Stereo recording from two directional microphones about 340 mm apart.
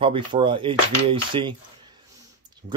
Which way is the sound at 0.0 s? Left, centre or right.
Centre.